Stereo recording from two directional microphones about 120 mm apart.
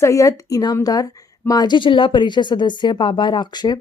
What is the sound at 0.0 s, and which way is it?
A woman's voice, 25° left (ahead or behind).